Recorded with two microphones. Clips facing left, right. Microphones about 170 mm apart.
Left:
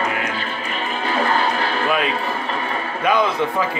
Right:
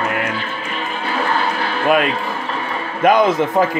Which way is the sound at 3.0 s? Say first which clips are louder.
Right 5 dB; 45° right (ahead or behind).